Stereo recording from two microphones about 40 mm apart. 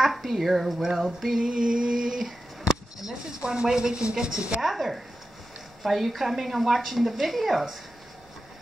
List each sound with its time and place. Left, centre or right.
0.0 s a woman's voice: centre
1.3 s speech: centre
4.6 s a woman's voice: centre